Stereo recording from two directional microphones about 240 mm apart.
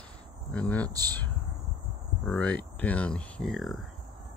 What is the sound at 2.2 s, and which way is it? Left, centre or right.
Speech, centre.